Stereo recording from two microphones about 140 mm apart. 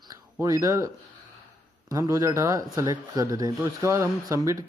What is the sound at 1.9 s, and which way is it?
Speech, 25° right (ahead or behind).